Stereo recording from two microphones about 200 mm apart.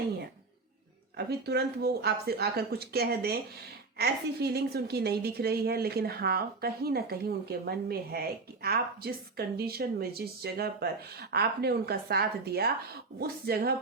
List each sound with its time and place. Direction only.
1.1 s a woman's voice: 55° right (ahead or behind)